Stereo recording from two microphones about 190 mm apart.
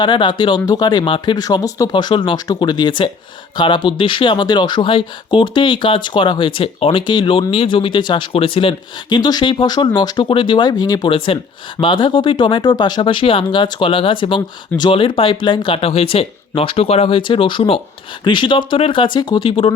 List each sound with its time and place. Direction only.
0.0 s speech: 25° left (ahead or behind)